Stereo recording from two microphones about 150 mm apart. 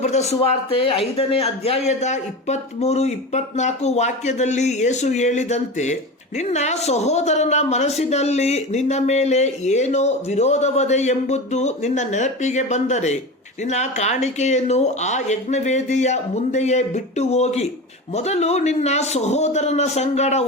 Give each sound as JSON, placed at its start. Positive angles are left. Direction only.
{"t": 0.0, "sound": "a man's voice", "side_deg": 45}